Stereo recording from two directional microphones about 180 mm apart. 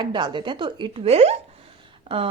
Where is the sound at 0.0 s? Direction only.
25° right (ahead or behind).